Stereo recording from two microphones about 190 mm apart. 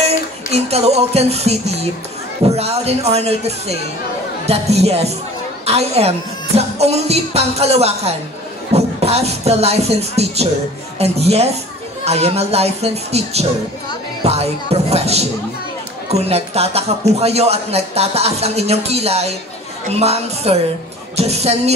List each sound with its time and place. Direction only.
0.5 s speech: 35° right (ahead or behind)